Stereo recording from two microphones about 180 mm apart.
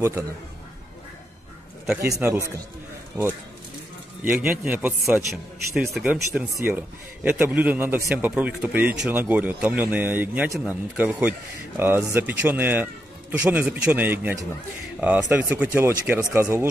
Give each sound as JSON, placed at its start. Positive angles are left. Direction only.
{"t": 2.0, "sound": "a man's voice", "side_deg": -15}